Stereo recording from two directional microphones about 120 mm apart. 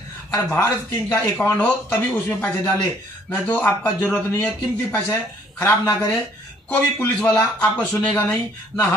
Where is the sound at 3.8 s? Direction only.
20° left (ahead or behind).